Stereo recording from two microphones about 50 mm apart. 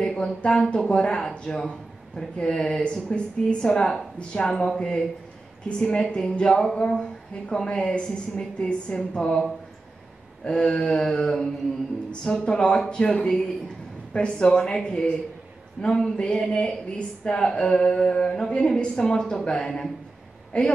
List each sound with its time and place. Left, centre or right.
0.0 s a woman's voice: centre
10.4 s a woman's voice: centre